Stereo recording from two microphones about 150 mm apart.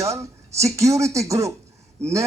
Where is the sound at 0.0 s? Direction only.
20° right (ahead or behind).